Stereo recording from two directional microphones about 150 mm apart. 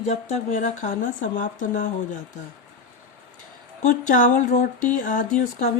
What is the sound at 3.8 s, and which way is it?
Speech, 55° left (ahead or behind).